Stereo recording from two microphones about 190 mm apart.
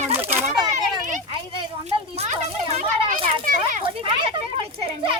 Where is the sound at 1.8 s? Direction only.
35° right (ahead or behind).